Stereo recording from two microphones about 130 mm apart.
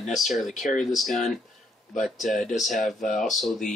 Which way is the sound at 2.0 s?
Centre (ahead or behind).